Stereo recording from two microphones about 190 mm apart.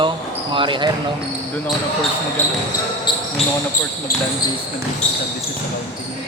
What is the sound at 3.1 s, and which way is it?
Basketball bounce, 25° left (ahead or behind).